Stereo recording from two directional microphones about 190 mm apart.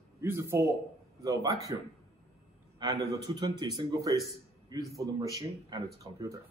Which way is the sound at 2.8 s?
20° right (ahead or behind).